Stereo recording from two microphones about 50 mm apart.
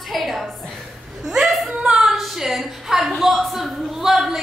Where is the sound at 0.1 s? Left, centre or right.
Centre.